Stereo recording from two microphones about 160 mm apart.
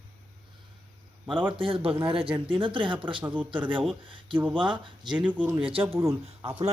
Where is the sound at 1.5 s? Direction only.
35° right (ahead or behind).